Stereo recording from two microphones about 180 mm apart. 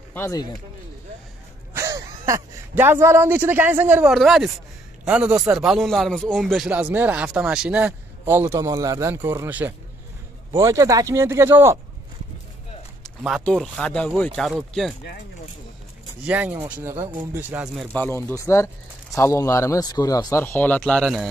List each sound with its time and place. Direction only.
0.1 s speech: 15° left (ahead or behind)
1.7 s a man's voice: 15° right (ahead or behind)
13.4 s speech: 5° left (ahead or behind)
16.3 s speech: 10° right (ahead or behind)
17.9 s speech: 10° left (ahead or behind)